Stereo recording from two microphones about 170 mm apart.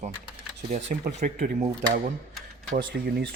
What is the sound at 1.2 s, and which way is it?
Speech, 55° right (ahead or behind).